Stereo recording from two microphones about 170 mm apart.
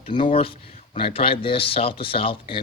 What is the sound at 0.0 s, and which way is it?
Speech, 30° left (ahead or behind).